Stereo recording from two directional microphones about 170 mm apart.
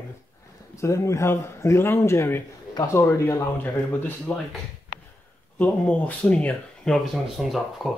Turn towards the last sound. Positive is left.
turn(degrees=0)  # may be behind; listen again after turning